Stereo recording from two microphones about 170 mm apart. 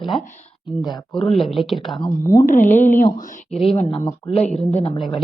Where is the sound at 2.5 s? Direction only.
45° left (ahead or behind).